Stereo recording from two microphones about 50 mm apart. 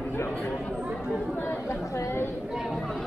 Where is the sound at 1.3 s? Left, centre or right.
Left.